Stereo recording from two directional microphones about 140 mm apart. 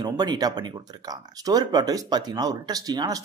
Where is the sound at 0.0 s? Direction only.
30° right (ahead or behind).